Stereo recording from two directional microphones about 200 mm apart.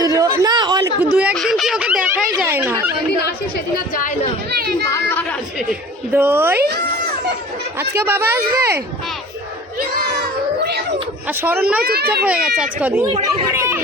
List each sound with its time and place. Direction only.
0.0 s a sound: 15° right (ahead or behind)
1.1 s a sound: 5° right (ahead or behind)
4.5 s a sound: 50° right (ahead or behind)
4.9 s chatter: 10° left (ahead or behind)
6.1 s speech: 10° right (ahead or behind)
7.8 s speech: 10° right (ahead or behind)
11.3 s speech: 10° right (ahead or behind)
11.8 s a child's voice: 50° right (ahead or behind)
12.2 s a child's voice: 5° right (ahead or behind)